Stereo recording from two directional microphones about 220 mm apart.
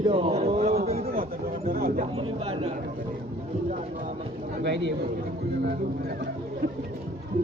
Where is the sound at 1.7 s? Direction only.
40° right (ahead or behind).